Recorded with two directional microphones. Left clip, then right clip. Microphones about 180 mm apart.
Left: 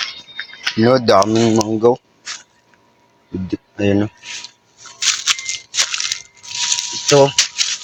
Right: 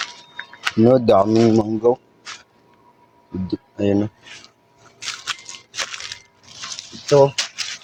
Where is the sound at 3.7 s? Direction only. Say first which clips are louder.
Left 3 dB; 30° left (ahead or behind).